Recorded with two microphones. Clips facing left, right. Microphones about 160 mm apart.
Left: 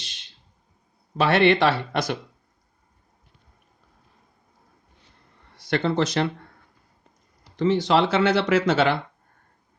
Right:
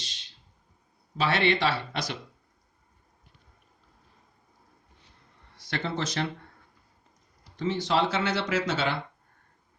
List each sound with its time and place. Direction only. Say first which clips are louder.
1.2 s speech: left 7 dB; 55° left (ahead or behind)
5.5 s speech: left 9 dB; 65° left (ahead or behind)
7.5 s speech: left 7 dB; 70° left (ahead or behind)